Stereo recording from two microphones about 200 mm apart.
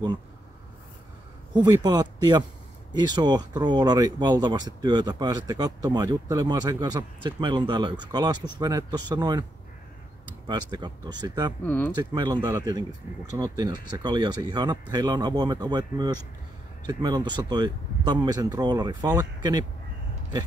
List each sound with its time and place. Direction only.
1.5 s speech: 20° right (ahead or behind)
11.6 s speech: 10° left (ahead or behind)
11.9 s speech: 20° right (ahead or behind)